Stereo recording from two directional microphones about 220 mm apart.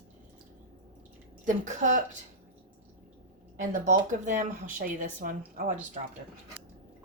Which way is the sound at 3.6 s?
35° right (ahead or behind).